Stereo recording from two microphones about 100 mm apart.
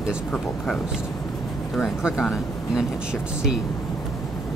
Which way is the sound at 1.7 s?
Centre (ahead or behind).